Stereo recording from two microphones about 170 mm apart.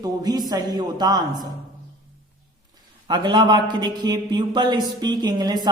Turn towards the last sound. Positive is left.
turn(degrees=-25)  # may be behind; listen again after turning